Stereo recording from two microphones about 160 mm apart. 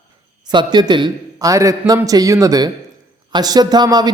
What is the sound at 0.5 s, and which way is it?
A man's voice, 25° right (ahead or behind).